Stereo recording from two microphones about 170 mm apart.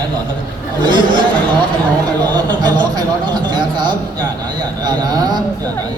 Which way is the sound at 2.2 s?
25° right (ahead or behind).